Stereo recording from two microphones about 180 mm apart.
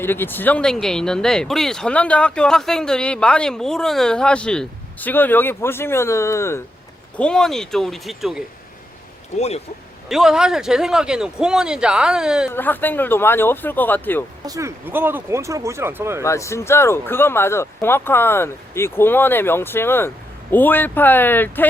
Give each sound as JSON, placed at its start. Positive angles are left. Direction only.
{"t": 0.0, "sound": "speech", "side_deg": 10}
{"t": 7.2, "sound": "speech", "side_deg": 5}
{"t": 9.3, "sound": "speech", "side_deg": 40}
{"t": 10.1, "sound": "speech", "side_deg": 0}
{"t": 12.5, "sound": "speech", "side_deg": 10}
{"t": 14.4, "sound": "speech", "side_deg": -20}
{"t": 16.2, "sound": "speech", "side_deg": 15}